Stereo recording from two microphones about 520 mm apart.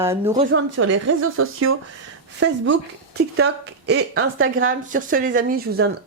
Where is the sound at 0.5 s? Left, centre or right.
Right.